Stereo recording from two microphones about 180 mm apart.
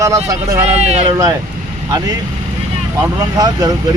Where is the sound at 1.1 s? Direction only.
20° right (ahead or behind).